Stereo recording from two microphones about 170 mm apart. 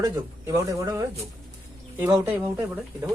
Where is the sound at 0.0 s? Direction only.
15° right (ahead or behind).